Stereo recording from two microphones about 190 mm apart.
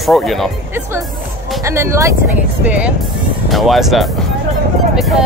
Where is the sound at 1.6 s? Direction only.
15° right (ahead or behind).